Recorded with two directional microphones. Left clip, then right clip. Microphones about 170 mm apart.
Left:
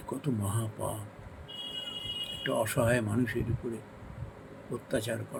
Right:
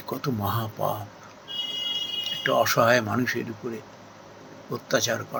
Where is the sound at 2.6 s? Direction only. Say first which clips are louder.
Right 9 dB; 20° left (ahead or behind).